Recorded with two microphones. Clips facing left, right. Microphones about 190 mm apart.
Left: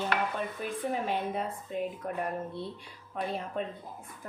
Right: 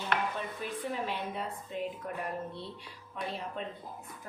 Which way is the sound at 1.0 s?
50° left (ahead or behind).